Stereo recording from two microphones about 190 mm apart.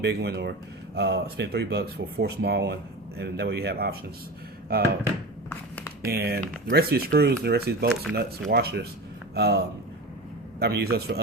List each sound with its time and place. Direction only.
0.0 s speech: 60° right (ahead or behind)
5.5 s a sound: 10° left (ahead or behind)
6.1 s speech: 55° right (ahead or behind)
10.6 s speech: 55° right (ahead or behind)